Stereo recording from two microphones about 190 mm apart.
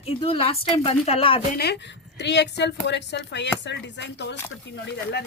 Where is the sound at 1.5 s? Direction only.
60° left (ahead or behind).